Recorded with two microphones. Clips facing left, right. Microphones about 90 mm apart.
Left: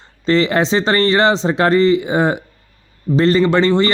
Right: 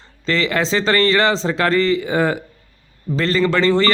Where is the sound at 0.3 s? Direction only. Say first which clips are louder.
Left 4 dB; 25° left (ahead or behind).